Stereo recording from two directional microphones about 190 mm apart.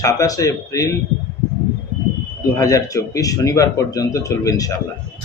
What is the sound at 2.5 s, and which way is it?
Speech, 20° left (ahead or behind).